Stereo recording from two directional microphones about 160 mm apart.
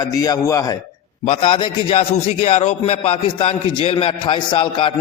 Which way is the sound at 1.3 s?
35° left (ahead or behind).